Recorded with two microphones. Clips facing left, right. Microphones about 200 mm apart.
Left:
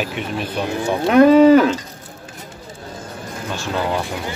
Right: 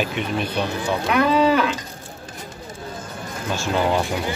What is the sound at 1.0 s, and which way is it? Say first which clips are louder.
Cattle: left 9 dB; 40° left (ahead or behind).